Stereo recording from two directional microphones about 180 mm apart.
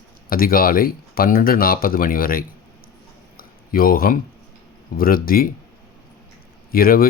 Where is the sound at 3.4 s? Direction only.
55° left (ahead or behind).